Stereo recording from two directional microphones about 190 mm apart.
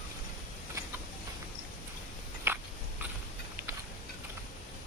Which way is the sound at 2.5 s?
10° right (ahead or behind).